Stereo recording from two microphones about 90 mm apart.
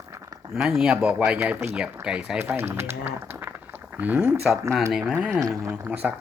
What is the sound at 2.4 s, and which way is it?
Speech, 25° right (ahead or behind).